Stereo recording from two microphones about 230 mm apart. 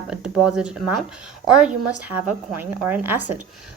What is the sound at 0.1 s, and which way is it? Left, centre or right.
Speech, centre.